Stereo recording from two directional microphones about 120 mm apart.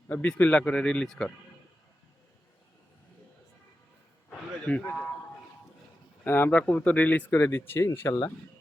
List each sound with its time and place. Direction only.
0.1 s speech: 15° left (ahead or behind)
4.3 s a sound: 10° left (ahead or behind)
6.2 s speech: 15° left (ahead or behind)